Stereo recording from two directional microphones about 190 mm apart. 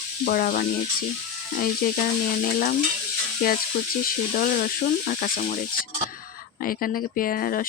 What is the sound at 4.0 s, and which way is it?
Speech, 50° left (ahead or behind).